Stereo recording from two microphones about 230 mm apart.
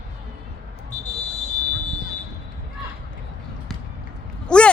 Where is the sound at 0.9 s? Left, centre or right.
Left.